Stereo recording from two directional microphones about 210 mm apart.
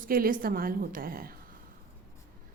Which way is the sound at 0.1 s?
45° right (ahead or behind).